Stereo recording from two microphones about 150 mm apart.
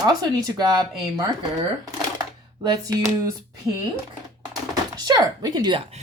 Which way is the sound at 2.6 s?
30° right (ahead or behind).